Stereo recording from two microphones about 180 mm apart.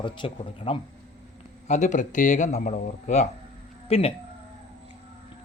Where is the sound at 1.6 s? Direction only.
40° left (ahead or behind).